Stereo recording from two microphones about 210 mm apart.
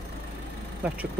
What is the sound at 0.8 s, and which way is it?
Speech, 5° right (ahead or behind).